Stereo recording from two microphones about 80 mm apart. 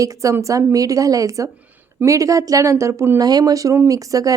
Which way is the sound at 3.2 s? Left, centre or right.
Right.